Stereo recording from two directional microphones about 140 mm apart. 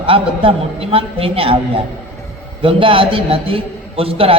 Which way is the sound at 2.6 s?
40° right (ahead or behind).